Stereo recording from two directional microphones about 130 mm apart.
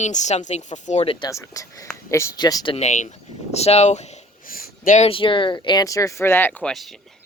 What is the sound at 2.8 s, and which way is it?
Speech, 65° left (ahead or behind).